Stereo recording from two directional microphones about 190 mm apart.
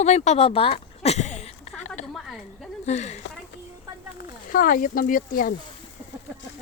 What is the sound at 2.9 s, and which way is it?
Speech, 35° left (ahead or behind).